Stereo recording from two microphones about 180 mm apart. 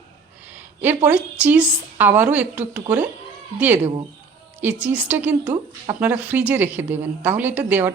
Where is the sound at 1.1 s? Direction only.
10° right (ahead or behind).